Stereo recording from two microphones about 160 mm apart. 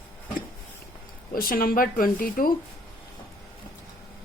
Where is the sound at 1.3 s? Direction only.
65° left (ahead or behind).